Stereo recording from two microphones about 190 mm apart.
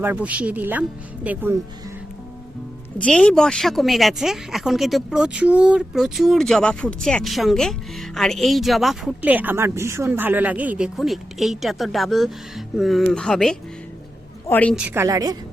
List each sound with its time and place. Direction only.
0.0 s speech: 10° right (ahead or behind)
3.0 s a woman's voice: 5° left (ahead or behind)
14.8 s speech: 15° right (ahead or behind)